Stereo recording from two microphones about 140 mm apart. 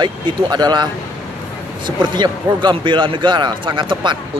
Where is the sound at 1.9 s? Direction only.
30° right (ahead or behind).